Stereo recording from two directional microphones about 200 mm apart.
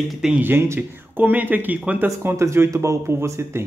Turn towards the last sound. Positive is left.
turn(degrees=-10)  # may be behind; listen again after turning